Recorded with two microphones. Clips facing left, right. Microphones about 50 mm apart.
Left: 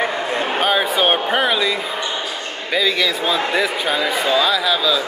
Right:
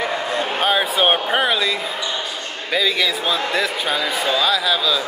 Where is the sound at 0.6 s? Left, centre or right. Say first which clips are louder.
Left 1 dB; centre.